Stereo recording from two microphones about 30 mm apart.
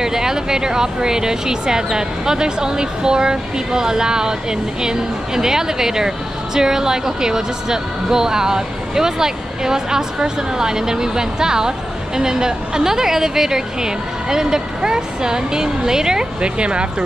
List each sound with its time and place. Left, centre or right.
0.0 s speech: centre
16.3 s speech: right